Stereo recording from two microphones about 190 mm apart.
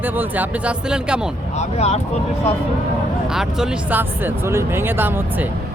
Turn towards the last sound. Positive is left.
turn(degrees=-10)  # may be behind; listen again after turning